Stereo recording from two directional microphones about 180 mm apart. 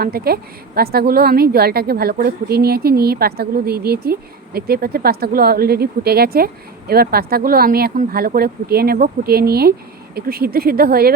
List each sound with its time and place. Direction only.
0.0 s a woman's voice: 60° right (ahead or behind)